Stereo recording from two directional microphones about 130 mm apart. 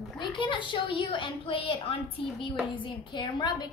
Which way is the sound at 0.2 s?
40° left (ahead or behind).